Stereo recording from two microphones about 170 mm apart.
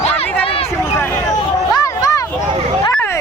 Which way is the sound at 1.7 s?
20° left (ahead or behind).